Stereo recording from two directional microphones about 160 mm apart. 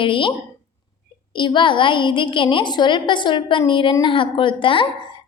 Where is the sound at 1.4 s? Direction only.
30° left (ahead or behind).